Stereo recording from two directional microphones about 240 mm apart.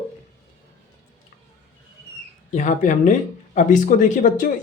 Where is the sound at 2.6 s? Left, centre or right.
Left.